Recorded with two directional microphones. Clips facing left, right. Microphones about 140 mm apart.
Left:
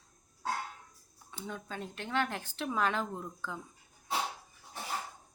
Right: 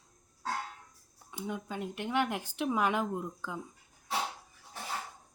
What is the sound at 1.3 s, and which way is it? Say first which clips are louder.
Speech: right 4 dB; 15° right (ahead or behind).